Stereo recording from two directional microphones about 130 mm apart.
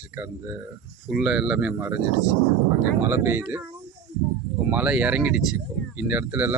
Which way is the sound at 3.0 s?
20° right (ahead or behind).